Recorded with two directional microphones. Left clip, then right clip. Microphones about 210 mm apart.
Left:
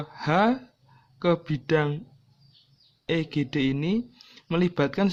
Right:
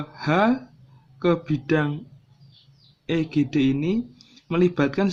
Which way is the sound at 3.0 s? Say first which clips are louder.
Right 3 dB; 25° left (ahead or behind).